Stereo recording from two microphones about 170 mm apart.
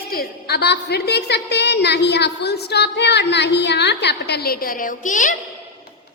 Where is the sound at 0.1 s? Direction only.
65° left (ahead or behind); by 5.3 s 50° left (ahead or behind).